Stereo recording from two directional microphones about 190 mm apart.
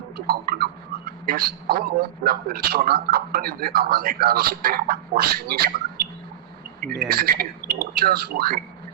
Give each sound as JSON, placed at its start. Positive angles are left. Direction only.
{"t": 0.3, "sound": "a man's voice", "side_deg": -50}
{"t": 7.1, "sound": "speech", "side_deg": -50}